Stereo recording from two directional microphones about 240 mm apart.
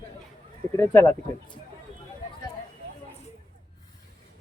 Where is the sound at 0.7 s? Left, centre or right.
Centre.